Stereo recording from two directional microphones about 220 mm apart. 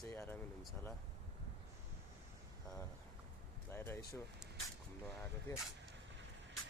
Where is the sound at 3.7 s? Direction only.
10° left (ahead or behind).